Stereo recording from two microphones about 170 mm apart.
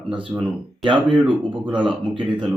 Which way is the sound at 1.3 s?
30° right (ahead or behind).